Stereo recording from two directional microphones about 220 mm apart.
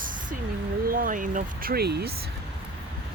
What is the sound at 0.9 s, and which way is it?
Speech, 40° right (ahead or behind).